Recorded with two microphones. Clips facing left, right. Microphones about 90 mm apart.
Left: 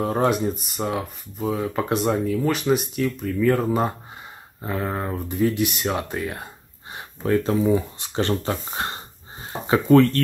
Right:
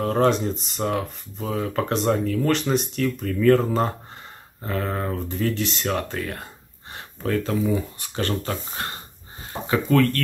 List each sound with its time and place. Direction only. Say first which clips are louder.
0.0 s speech: right 1 dB; 10° left (ahead or behind); by 10.2 s 25° left (ahead or behind)